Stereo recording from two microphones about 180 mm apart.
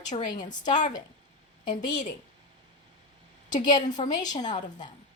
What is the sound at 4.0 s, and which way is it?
Speech, 30° left (ahead or behind).